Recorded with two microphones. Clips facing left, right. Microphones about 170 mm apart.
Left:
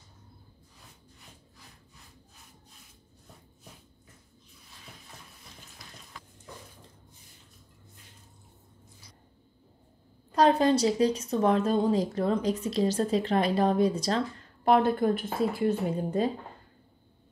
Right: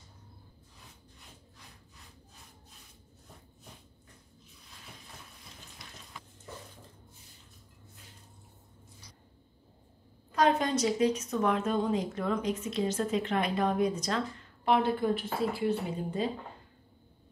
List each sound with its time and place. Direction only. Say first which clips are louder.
10.3 s a woman's voice: left 5 dB; 35° left (ahead or behind)
14.6 s a woman's voice: left 4 dB; 45° left (ahead or behind)